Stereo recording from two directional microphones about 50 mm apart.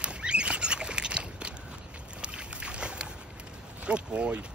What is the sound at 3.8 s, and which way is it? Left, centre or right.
Speech, right.